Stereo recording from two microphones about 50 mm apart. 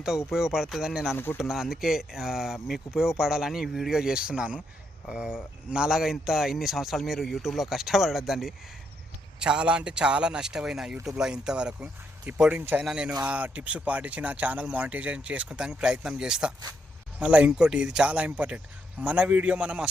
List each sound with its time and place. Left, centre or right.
0.3 s speech: centre
1.1 s speech: left
1.4 s speech: centre
9.4 s speech: centre
12.5 s speech: right
13.0 s speech: right
17.2 s speech: right